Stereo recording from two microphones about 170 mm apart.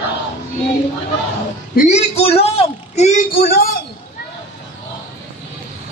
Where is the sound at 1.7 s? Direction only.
40° left (ahead or behind).